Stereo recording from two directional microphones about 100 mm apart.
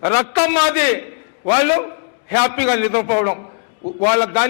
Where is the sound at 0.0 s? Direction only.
20° left (ahead or behind).